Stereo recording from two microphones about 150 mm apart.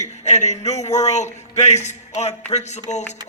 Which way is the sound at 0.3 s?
50° left (ahead or behind).